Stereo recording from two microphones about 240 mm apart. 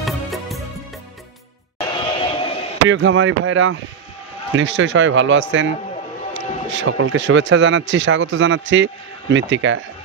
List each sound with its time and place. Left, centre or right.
0.0 s music: centre
1.8 s a sound: left
2.9 s speech: right